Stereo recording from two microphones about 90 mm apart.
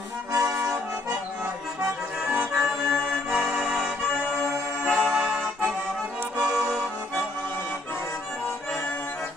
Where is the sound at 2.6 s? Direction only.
Centre (ahead or behind).